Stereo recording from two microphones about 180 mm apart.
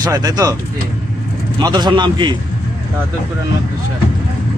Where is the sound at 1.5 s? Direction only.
25° right (ahead or behind).